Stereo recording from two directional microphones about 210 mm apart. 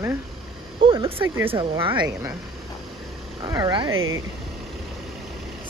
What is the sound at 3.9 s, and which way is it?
Speech, 75° right (ahead or behind).